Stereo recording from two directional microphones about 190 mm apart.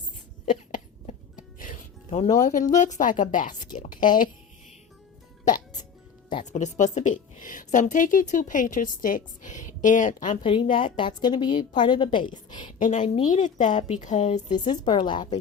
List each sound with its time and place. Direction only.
0.7 s music: 45° left (ahead or behind)
4.0 s a woman's voice: 45° left (ahead or behind)
6.4 s a woman's voice: 40° left (ahead or behind)
10.4 s a woman's voice: 25° left (ahead or behind)
12.8 s a woman's voice: 40° left (ahead or behind)
14.5 s a woman's voice: 25° left (ahead or behind)